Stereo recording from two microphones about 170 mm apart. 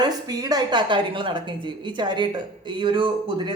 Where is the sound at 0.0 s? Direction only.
20° right (ahead or behind).